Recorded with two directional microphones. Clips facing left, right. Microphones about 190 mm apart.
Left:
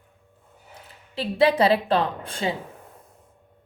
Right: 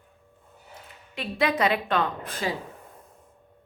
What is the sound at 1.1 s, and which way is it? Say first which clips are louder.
A woman's voice: left 6 dB; 30° left (ahead or behind).